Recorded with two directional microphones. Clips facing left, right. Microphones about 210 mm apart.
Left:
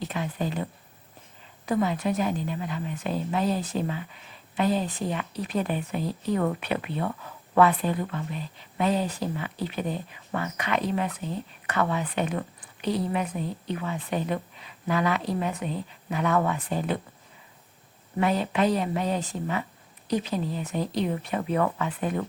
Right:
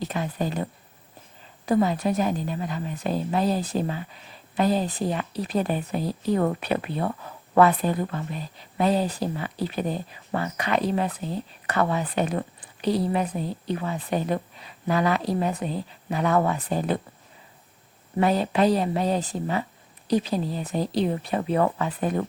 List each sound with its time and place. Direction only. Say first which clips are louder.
0.1 s speech: right 2 dB; 40° right (ahead or behind)
18.2 s speech: right 3 dB; 35° right (ahead or behind)